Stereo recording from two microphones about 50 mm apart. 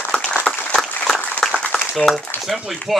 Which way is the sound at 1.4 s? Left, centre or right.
Centre.